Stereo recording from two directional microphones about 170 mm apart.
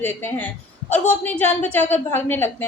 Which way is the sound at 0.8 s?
45° left (ahead or behind).